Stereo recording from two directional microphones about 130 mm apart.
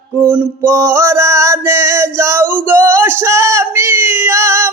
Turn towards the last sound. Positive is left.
turn(degrees=-20)  # may be behind; listen again after turning